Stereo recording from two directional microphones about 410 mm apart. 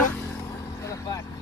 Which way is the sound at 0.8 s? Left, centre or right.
Centre.